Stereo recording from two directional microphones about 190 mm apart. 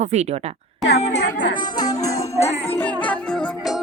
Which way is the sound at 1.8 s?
20° left (ahead or behind).